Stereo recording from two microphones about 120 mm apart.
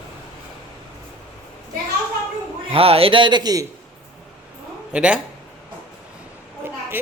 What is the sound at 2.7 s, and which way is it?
Speech, 55° right (ahead or behind).